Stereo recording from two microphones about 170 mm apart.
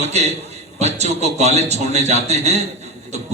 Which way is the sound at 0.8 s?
40° right (ahead or behind).